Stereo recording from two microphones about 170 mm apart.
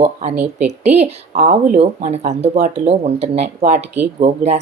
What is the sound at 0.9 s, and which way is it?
A woman's voice, 40° right (ahead or behind).